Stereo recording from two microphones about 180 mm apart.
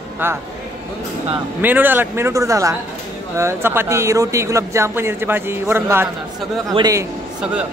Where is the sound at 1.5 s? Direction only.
10° right (ahead or behind).